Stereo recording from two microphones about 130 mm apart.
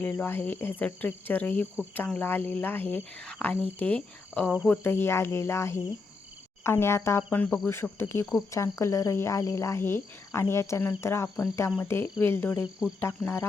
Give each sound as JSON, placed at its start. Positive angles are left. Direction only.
{"t": 0.0, "sound": "speech", "side_deg": 15}
{"t": 4.8, "sound": "frog", "side_deg": 20}
{"t": 12.2, "sound": "speech", "side_deg": 15}